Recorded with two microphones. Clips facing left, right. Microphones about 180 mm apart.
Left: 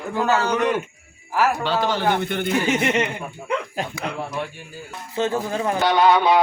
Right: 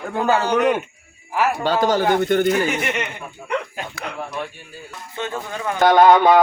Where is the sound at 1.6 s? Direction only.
45° right (ahead or behind).